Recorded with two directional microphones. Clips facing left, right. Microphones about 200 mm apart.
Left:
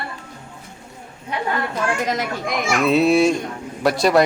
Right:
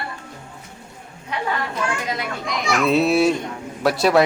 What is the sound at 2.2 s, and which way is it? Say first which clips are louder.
Speech: left 3 dB; 50° left (ahead or behind).